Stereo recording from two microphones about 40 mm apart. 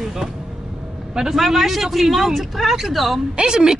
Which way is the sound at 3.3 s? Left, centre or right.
Right.